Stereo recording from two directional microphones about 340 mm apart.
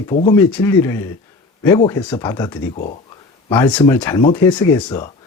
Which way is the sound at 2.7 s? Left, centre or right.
Left.